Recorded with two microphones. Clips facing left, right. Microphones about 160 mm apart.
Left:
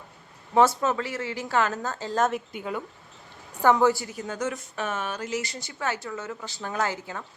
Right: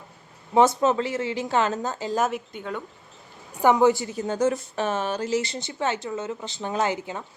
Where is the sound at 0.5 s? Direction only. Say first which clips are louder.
Right 2 dB; 20° right (ahead or behind).